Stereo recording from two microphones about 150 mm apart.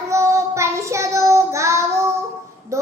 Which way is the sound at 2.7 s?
20° right (ahead or behind).